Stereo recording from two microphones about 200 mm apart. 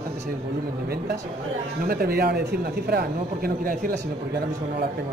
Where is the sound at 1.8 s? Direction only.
50° right (ahead or behind).